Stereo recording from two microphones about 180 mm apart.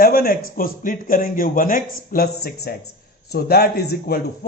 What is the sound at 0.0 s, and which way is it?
Speech, 55° left (ahead or behind).